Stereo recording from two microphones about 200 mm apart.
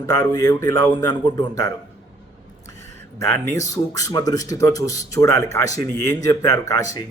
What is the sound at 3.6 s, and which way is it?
A man's voice, 15° left (ahead or behind).